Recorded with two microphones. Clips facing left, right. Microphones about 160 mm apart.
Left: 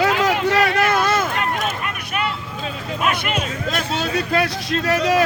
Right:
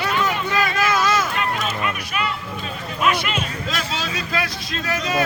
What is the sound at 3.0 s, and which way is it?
Music, 50° left (ahead or behind).